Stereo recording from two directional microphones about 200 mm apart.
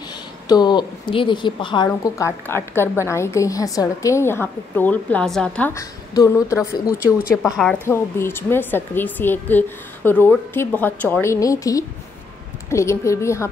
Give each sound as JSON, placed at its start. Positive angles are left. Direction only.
{"t": 0.5, "sound": "a woman's voice", "side_deg": 20}
{"t": 1.9, "sound": "a woman's voice", "side_deg": 15}